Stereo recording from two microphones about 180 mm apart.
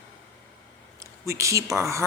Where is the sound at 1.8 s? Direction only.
15° right (ahead or behind).